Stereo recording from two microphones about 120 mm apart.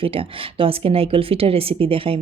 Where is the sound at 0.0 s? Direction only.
50° right (ahead or behind).